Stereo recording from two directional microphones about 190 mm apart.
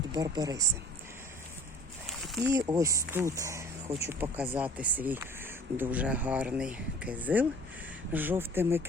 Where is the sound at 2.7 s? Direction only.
15° right (ahead or behind).